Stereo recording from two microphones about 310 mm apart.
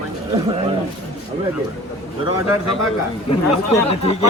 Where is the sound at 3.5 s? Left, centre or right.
Centre.